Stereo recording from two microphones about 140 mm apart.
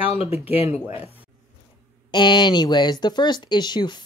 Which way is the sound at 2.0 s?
35° left (ahead or behind).